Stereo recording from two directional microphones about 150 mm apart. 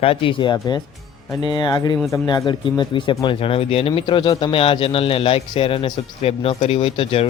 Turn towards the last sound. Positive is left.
turn(degrees=40)  # may be behind; listen again after turning